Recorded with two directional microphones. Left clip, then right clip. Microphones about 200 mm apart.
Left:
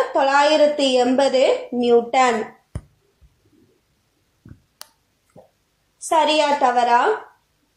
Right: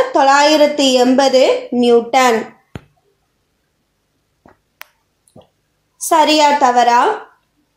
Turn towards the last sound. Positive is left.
turn(degrees=-45)  # may be behind; listen again after turning